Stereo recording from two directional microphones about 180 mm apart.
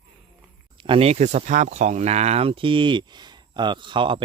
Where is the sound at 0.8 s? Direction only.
30° right (ahead or behind).